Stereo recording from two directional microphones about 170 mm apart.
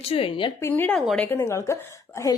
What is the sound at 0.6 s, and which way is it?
A woman's voice, 10° left (ahead or behind).